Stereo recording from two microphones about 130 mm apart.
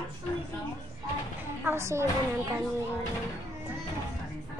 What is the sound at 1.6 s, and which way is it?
Speech, 20° right (ahead or behind).